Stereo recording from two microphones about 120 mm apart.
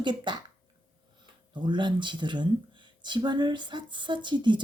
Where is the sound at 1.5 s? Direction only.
40° right (ahead or behind).